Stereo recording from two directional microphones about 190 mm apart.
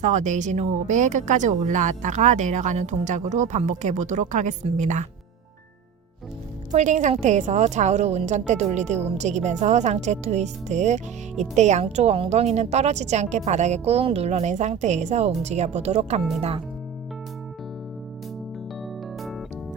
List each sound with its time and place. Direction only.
0.0 s a woman's voice: 40° right (ahead or behind)
6.7 s a woman's voice: 40° right (ahead or behind)